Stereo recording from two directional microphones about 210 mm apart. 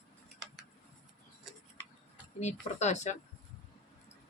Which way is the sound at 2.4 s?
35° left (ahead or behind).